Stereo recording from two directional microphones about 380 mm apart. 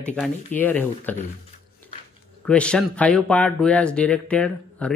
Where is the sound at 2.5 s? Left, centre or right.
Centre.